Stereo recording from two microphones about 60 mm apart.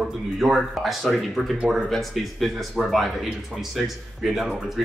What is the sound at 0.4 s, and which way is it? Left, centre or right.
Speech, centre.